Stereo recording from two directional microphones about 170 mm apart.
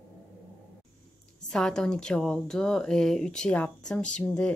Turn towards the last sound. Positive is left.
turn(degrees=5)  # may be behind; listen again after turning